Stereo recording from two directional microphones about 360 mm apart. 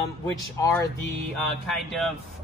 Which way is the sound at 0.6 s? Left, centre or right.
Centre.